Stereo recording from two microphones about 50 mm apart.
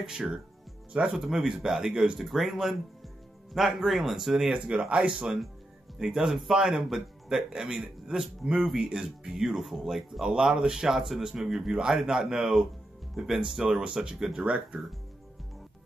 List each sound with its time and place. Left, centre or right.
0.0 s speech: centre
4.6 s speech: right
5.9 s speech: centre
13.8 s speech: right